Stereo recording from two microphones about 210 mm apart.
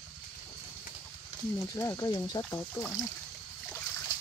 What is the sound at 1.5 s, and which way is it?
Speech, 15° left (ahead or behind).